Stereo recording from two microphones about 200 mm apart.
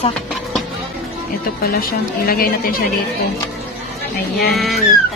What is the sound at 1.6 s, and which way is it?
A woman's voice, 50° left (ahead or behind).